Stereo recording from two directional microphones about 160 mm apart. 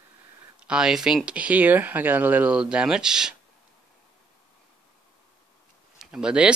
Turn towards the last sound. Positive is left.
turn(degrees=-5)  # may be behind; listen again after turning